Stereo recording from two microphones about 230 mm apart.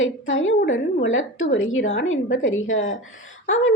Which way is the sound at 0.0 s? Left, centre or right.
Left.